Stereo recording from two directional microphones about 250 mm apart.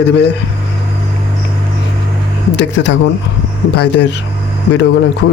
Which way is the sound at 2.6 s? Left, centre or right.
Left.